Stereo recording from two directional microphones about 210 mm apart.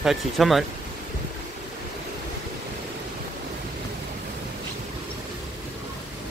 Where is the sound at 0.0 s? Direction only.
Centre (ahead or behind).